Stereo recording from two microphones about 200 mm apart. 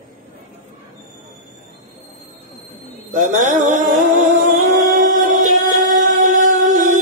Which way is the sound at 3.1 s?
40° right (ahead or behind).